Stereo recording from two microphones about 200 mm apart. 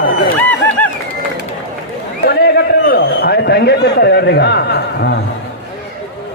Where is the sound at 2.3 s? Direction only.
55° left (ahead or behind).